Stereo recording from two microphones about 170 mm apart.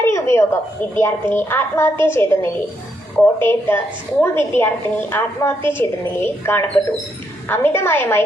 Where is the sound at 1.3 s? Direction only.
10° left (ahead or behind).